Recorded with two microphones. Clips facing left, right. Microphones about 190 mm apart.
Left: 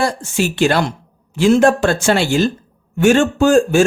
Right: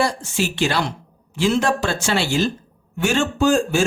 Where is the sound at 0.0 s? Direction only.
50° left (ahead or behind).